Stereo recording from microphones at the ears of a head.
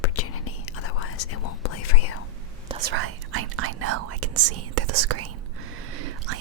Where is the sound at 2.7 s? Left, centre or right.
Right.